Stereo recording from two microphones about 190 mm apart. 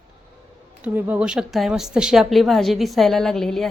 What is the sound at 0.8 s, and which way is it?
Speech, 10° right (ahead or behind).